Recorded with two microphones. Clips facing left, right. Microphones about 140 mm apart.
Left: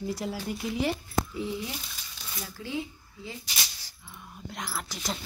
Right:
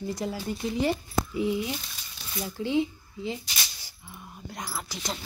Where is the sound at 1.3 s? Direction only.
15° right (ahead or behind).